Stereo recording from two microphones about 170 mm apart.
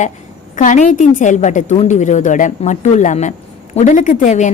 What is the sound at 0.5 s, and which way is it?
Speech, 45° left (ahead or behind).